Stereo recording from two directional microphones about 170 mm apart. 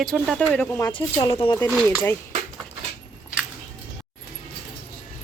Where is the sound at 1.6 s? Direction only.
10° left (ahead or behind).